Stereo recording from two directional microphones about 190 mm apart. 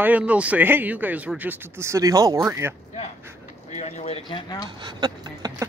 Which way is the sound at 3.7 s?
35° left (ahead or behind).